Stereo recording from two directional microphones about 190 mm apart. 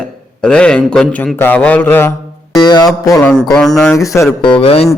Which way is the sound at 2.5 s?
20° left (ahead or behind).